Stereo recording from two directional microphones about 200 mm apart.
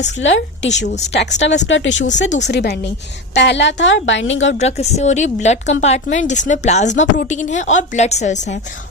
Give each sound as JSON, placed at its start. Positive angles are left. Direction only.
{"t": 0.2, "sound": "a woman's voice", "side_deg": 70}
{"t": 0.9, "sound": "speech", "side_deg": 35}
{"t": 1.1, "sound": "a woman's voice", "side_deg": 60}
{"t": 4.5, "sound": "speech", "side_deg": 35}